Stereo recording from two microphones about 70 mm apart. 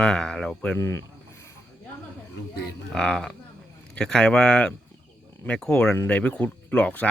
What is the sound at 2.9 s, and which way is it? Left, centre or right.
Speech, centre.